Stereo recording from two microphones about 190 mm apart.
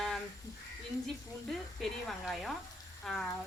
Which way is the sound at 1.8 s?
Centre (ahead or behind).